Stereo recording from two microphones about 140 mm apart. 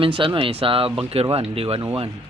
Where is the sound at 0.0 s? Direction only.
40° right (ahead or behind).